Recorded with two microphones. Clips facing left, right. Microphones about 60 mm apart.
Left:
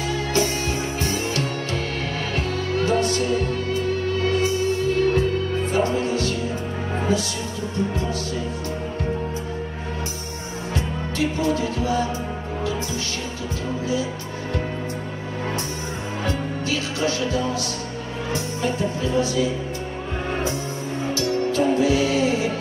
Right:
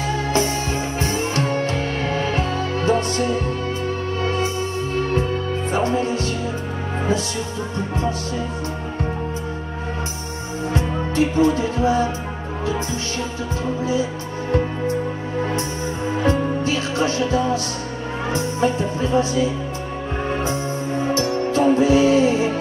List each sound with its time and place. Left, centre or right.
0.1 s music: right
5.7 s music: right
10.7 s music: right
16.2 s music: right
18.3 s speech: right
21.1 s music: right